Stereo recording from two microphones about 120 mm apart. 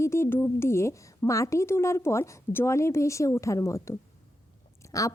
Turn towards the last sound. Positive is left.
turn(degrees=30)  # may be behind; listen again after turning